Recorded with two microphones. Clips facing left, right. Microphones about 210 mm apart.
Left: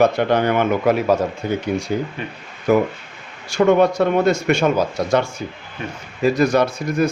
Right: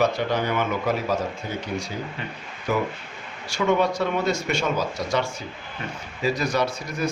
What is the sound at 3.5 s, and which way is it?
A man's voice, 50° left (ahead or behind).